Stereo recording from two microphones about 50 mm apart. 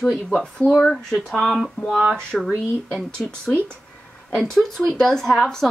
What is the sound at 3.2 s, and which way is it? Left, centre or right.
Speech, left.